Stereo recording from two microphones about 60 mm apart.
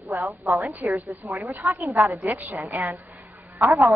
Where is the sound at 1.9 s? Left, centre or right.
Right.